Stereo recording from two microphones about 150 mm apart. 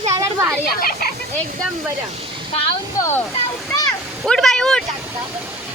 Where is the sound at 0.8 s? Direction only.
85° left.